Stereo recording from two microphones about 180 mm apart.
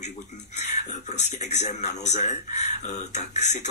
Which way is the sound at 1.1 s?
40° left (ahead or behind).